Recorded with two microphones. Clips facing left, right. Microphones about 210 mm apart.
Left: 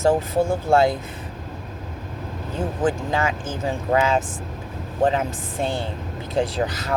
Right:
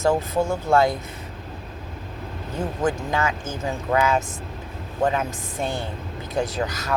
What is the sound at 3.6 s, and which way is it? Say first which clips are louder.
Speech: left 1 dB; 30° left (ahead or behind).